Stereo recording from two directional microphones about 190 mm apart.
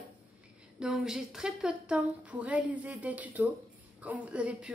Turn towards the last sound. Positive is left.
turn(degrees=-5)  # may be behind; listen again after turning